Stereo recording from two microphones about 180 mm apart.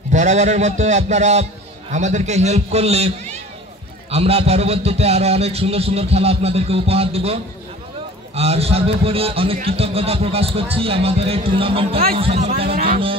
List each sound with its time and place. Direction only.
0.1 s a man's voice: 40° right (ahead or behind)
8.4 s a man's voice: 35° right (ahead or behind)
12.7 s speech: 50° right (ahead or behind)